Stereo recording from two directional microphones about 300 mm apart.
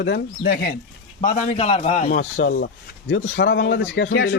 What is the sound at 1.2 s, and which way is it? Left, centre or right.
A man's voice, left.